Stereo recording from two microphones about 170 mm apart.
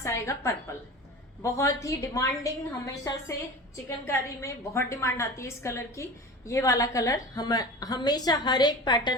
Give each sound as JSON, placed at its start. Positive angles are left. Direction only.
{"t": 0.0, "sound": "a woman's voice", "side_deg": 15}